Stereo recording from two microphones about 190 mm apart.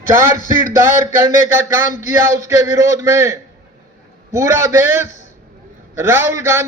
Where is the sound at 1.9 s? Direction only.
40° left (ahead or behind).